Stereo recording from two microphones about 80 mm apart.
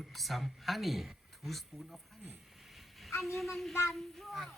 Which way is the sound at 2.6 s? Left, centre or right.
Centre.